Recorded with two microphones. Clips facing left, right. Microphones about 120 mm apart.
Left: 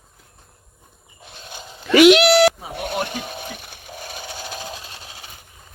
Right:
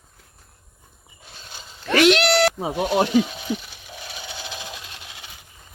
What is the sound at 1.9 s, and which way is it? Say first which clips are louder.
Cat: left 5 dB; 10° left (ahead or behind).